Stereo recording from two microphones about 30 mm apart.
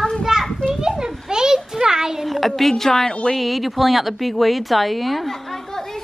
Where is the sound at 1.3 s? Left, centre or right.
Right.